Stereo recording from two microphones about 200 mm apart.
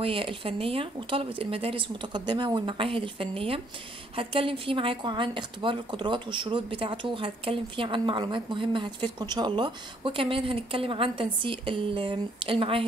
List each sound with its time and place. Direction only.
0.0 s a woman's voice: 25° right (ahead or behind)